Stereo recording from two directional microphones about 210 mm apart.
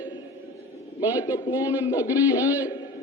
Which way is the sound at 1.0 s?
20° left (ahead or behind).